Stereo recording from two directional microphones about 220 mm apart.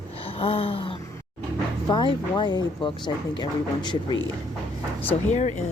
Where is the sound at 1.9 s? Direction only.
20° left (ahead or behind).